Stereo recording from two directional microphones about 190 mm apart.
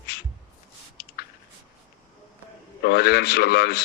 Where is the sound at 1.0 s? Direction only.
55° left (ahead or behind).